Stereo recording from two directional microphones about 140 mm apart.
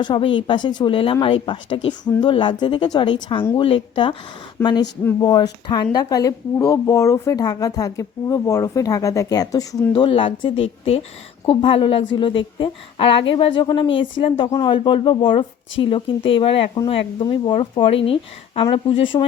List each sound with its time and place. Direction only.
0.0 s a woman's voice: 35° left (ahead or behind)
9.9 s a woman's voice: 35° left (ahead or behind)